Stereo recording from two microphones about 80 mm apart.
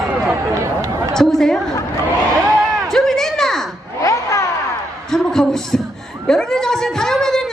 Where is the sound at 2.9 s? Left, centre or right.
Centre.